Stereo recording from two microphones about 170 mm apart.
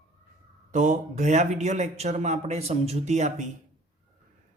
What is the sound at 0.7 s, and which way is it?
Speech, 45° right (ahead or behind).